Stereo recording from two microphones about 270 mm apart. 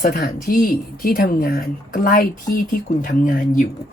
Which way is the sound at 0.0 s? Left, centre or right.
Left.